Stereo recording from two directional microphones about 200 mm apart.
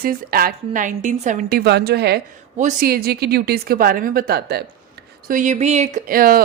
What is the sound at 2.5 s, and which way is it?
A woman's voice, 40° right (ahead or behind).